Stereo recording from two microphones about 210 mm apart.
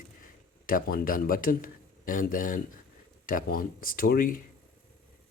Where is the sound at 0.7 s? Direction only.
40° left (ahead or behind).